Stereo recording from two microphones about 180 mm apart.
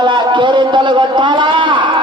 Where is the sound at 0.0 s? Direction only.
25° right (ahead or behind).